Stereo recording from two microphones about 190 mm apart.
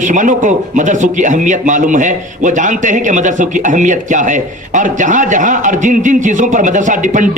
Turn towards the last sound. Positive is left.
turn(degrees=-40)  # may be behind; listen again after turning